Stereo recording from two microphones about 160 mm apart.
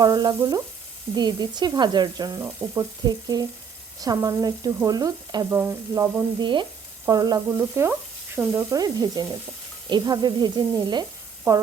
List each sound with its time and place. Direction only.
0.0 s speech: 25° right (ahead or behind)
6.4 s speech: 30° right (ahead or behind)